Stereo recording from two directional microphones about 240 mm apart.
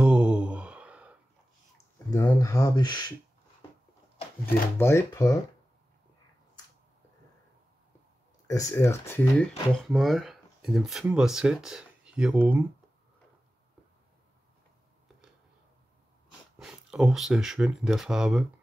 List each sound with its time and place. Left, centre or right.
0.0 s a sound: centre
2.0 s speech: centre
4.5 s speech: centre
8.5 s speech: centre
16.5 s speech: centre